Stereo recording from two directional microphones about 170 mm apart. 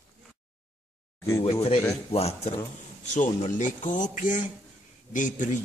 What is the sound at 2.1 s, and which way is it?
Speech, 35° left (ahead or behind).